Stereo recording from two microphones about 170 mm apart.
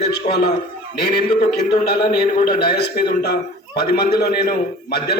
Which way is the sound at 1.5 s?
70° left (ahead or behind).